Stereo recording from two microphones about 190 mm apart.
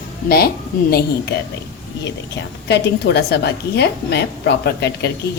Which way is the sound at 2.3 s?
65° left (ahead or behind).